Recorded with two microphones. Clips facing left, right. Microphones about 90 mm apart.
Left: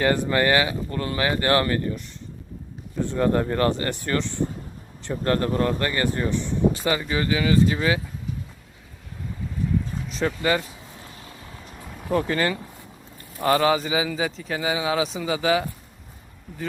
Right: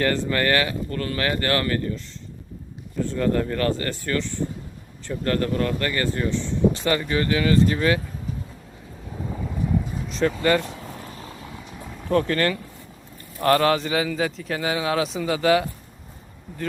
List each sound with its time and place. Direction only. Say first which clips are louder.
0.0 s speech: left 1 dB; 15° left (ahead or behind)
3.0 s speech: left 1 dB; 20° left (ahead or behind)
10.1 s speech: right 3 dB; 5° left (ahead or behind)
11.1 s vehicle: right 5 dB; 35° right (ahead or behind)
12.0 s a man's voice: right 2 dB; 10° left (ahead or behind)